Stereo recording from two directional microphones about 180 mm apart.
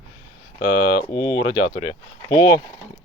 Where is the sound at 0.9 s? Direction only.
20° left (ahead or behind).